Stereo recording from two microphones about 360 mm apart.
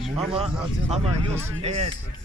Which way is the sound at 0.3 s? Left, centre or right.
Centre.